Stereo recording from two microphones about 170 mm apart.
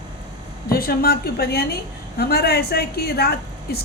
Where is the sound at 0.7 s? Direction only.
60° left (ahead or behind).